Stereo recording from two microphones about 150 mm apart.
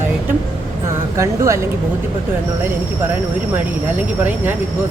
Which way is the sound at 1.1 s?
20° right (ahead or behind).